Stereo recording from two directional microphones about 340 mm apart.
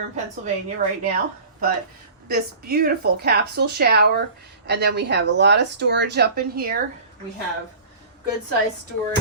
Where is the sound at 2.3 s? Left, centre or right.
Right.